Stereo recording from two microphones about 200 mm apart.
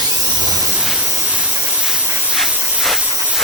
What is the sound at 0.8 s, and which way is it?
Steam, 5° right (ahead or behind).